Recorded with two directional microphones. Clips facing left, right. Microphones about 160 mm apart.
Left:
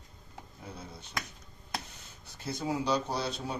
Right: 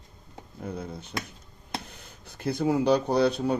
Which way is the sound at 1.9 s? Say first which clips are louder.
Right 5 dB; 55° right (ahead or behind).